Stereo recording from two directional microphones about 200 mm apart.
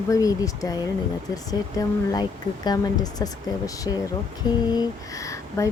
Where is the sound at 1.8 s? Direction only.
20° left (ahead or behind).